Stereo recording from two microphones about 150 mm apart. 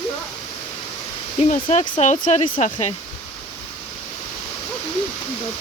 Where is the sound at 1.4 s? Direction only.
50° left (ahead or behind).